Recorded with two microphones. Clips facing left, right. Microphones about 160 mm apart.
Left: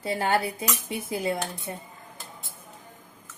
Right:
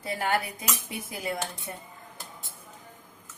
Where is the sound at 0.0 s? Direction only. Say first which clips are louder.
Left 3 dB; 30° left (ahead or behind).